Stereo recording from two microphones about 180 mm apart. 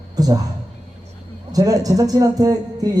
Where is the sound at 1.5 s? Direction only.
20° right (ahead or behind).